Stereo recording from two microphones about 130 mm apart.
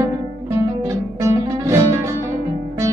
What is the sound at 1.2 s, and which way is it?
Music, 25° right (ahead or behind).